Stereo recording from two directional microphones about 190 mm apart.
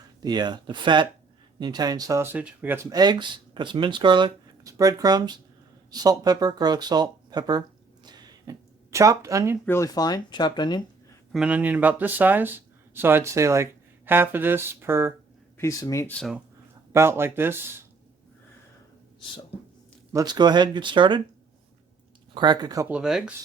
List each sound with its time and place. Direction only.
0.2 s speech: 20° right (ahead or behind)
2.9 s speech: 20° right (ahead or behind)
8.0 s a sound: 20° right (ahead or behind)
9.6 s speech: 15° left (ahead or behind)
11.3 s speech: 5° right (ahead or behind)
15.5 s speech: 15° left (ahead or behind)
16.9 s speech: 15° right (ahead or behind)
20.1 s speech: 20° right (ahead or behind)
22.4 s speech: 20° right (ahead or behind)
22.9 s speech: 5° right (ahead or behind)